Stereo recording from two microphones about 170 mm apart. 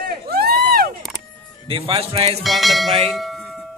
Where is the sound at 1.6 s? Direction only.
30° right (ahead or behind).